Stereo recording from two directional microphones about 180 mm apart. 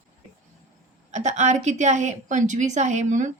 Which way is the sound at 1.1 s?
40° right (ahead or behind).